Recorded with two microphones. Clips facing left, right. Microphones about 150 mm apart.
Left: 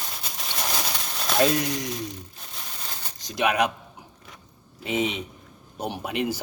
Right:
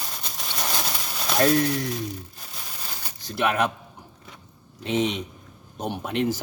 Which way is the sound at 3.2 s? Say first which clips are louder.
Even; 15° left (ahead or behind).